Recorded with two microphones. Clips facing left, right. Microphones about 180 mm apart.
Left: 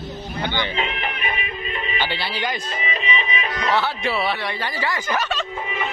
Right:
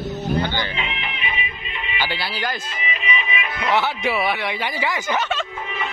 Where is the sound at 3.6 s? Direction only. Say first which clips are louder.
Right 2 dB; 15° right (ahead or behind).